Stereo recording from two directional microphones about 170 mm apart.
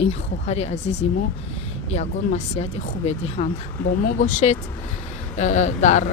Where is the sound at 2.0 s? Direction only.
40° left (ahead or behind).